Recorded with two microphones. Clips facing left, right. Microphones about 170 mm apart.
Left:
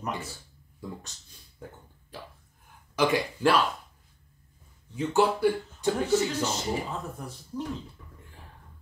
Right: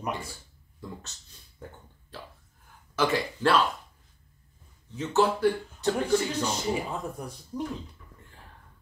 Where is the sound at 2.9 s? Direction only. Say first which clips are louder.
Left 1 dB; 15° left (ahead or behind).